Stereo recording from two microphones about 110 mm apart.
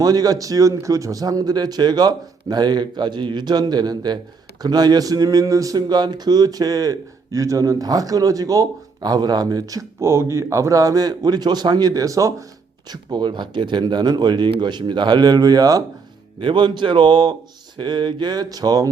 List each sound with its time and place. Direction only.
0.0 s speech: 35° right (ahead or behind)
12.9 s speech: 40° right (ahead or behind)
16.4 s speech: 50° right (ahead or behind)